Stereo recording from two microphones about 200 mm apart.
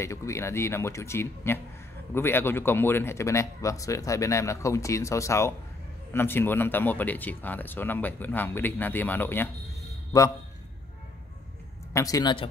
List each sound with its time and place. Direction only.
0.0 s speech: 15° left (ahead or behind)
11.9 s speech: 15° left (ahead or behind)